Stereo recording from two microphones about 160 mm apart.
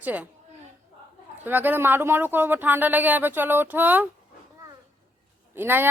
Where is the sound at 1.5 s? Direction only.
10° right (ahead or behind).